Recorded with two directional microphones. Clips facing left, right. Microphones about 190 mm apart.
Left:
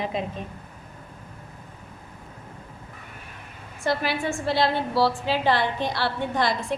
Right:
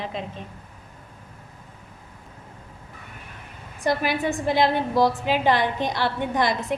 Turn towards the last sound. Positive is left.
turn(degrees=-20)  # may be behind; listen again after turning